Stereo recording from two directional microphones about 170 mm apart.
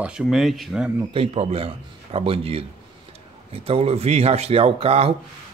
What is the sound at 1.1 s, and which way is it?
Speech, 35° right (ahead or behind).